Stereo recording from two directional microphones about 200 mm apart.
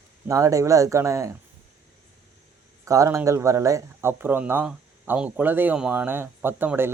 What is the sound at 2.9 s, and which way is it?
Speech, 15° right (ahead or behind).